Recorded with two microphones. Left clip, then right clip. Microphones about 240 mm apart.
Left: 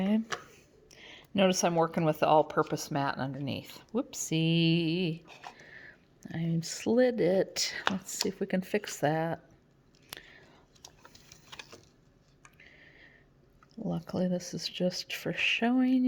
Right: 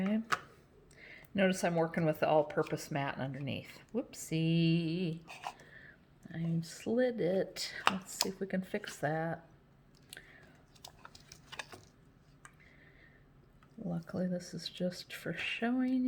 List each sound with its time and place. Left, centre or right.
1.0 s speech: left
5.4 s whispering: centre
5.6 s speech: left
13.8 s speech: left